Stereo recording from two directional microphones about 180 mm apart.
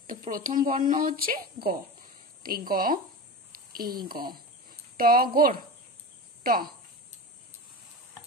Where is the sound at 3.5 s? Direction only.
55° right (ahead or behind).